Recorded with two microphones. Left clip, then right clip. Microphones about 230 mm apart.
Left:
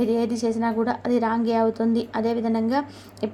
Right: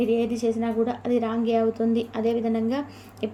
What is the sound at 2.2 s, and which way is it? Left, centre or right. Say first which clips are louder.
Speech: right 1 dB; left.